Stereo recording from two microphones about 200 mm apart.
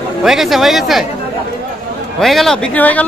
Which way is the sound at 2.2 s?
Centre (ahead or behind).